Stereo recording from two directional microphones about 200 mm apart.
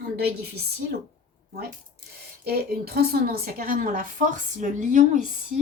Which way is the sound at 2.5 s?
50° right (ahead or behind).